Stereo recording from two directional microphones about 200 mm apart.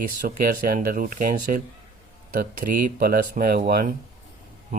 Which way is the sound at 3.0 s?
45° right (ahead or behind).